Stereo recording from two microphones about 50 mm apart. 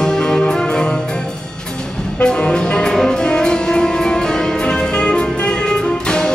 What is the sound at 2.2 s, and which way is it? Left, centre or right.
Music, centre.